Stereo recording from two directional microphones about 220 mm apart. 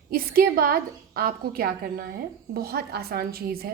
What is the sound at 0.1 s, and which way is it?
A woman's voice, 40° right (ahead or behind).